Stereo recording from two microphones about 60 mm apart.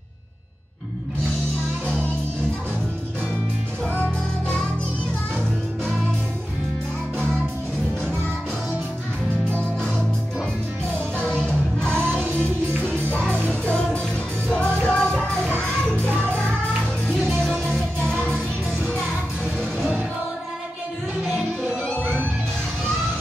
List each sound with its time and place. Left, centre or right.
3.9 s music: left
12.0 s music: right
13.5 s music: centre
17.1 s music: centre